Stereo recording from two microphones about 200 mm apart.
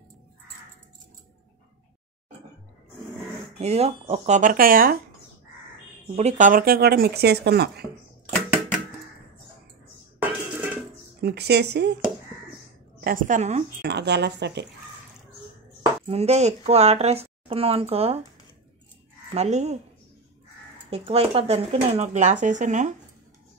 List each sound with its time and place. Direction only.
3.5 s a woman's voice: 30° right (ahead or behind)
6.1 s speech: 35° right (ahead or behind); by 7.8 s 55° right (ahead or behind)
10.2 s dishes: 10° right (ahead or behind)
11.1 s speech: 55° right (ahead or behind)
13.0 s a woman's voice: 40° right (ahead or behind)
13.8 s speech: 55° right (ahead or behind)
16.1 s a woman's voice: 30° right (ahead or behind)
19.3 s a woman's voice: 35° right (ahead or behind)
20.9 s a woman's voice: 30° right (ahead or behind)